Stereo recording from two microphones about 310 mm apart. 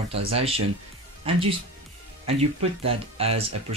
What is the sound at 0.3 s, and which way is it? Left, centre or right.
Speech, centre.